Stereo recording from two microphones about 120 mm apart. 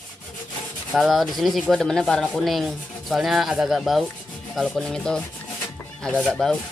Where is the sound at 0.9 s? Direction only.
Centre (ahead or behind).